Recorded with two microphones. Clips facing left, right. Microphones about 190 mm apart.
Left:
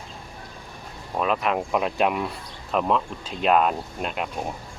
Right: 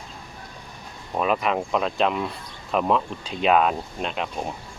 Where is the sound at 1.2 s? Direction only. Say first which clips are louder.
Right 1 dB; centre (ahead or behind).